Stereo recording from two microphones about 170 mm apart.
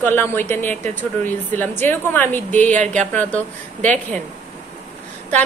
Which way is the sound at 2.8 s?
45° right (ahead or behind).